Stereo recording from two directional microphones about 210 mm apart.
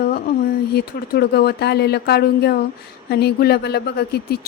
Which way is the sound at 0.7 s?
50° left (ahead or behind).